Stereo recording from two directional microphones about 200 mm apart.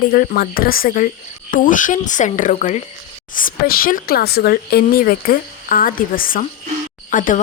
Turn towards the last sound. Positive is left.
turn(degrees=40)  # may be behind; listen again after turning